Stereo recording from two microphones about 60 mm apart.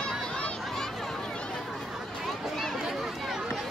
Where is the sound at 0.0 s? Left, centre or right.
Centre.